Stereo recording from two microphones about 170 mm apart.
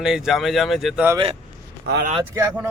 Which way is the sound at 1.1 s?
35° right (ahead or behind).